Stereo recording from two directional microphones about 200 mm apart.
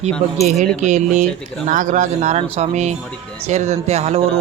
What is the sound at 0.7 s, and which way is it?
Speech, 35° right (ahead or behind).